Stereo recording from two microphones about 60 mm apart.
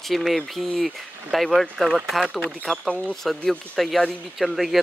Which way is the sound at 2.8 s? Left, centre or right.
Left.